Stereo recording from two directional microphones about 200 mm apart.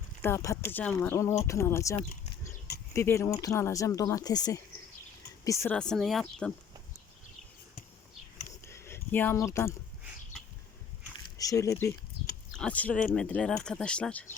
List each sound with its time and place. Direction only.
0.2 s speech: 15° left (ahead or behind)
8.6 s a sound: 15° left (ahead or behind)
11.3 s speech: 15° left (ahead or behind)